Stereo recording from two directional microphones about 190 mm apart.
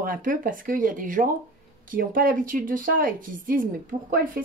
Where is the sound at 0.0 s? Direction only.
45° right (ahead or behind).